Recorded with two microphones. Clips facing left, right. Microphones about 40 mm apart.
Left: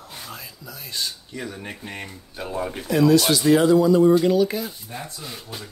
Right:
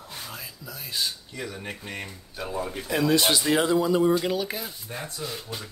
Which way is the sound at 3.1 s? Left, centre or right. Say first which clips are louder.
Left 5 dB; right.